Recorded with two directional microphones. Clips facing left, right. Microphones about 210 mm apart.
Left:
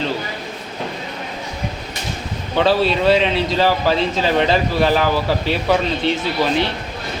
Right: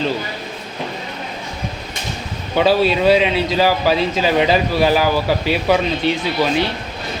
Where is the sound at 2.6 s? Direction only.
5° right (ahead or behind).